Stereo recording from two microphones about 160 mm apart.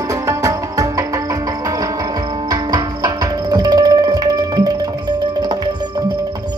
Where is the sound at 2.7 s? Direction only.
25° right (ahead or behind).